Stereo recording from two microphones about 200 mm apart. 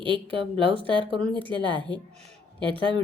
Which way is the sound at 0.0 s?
25° right (ahead or behind).